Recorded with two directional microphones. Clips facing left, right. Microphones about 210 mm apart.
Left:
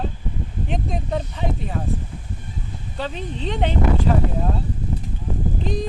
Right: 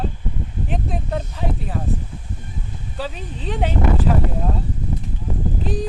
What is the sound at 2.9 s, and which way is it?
Speech, 5° right (ahead or behind).